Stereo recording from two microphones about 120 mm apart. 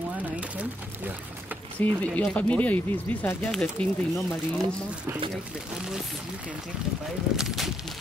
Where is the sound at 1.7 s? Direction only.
10° left (ahead or behind).